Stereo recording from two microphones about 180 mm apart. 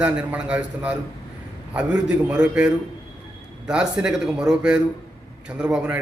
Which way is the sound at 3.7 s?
5° right (ahead or behind).